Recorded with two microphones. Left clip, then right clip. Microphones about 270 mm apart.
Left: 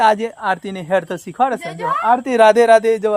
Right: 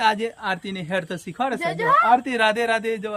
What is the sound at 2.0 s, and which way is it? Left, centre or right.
Speech, centre.